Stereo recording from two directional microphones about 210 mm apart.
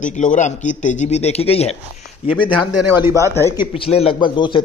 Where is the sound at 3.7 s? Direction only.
30° left (ahead or behind).